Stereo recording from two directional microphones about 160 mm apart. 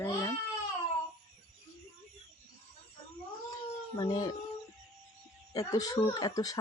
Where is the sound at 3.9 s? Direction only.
25° left (ahead or behind).